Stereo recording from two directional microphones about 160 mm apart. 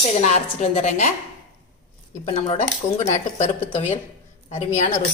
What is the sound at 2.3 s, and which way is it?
A woman's voice, 45° left (ahead or behind).